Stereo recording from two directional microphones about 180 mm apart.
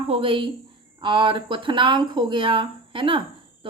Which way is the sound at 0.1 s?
30° right (ahead or behind).